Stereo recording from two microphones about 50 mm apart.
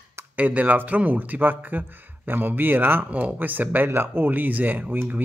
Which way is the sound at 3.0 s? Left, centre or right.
Right.